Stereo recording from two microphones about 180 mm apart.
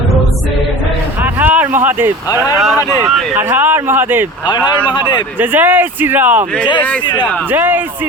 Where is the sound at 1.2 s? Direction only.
10° right (ahead or behind).